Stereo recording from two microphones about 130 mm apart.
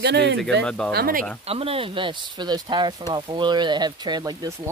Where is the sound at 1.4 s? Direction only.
50° right (ahead or behind); by 4.5 s 30° right (ahead or behind).